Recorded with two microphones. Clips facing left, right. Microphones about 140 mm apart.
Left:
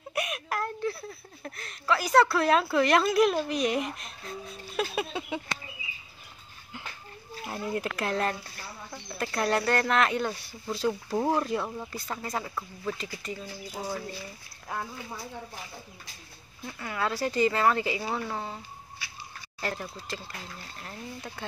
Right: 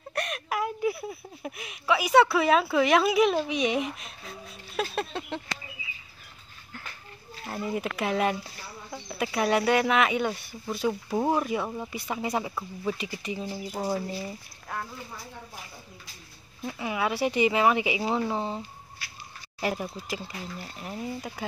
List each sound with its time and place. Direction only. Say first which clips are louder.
0.1 s a sound: right 1 dB; 5° left (ahead or behind)
2.1 s speech: right 2 dB; 5° right (ahead or behind)
7.4 s speech: right 1 dB; centre (ahead or behind)
16.6 s speech: right 3 dB; 15° right (ahead or behind)
19.6 s speech: right 4 dB; 15° right (ahead or behind)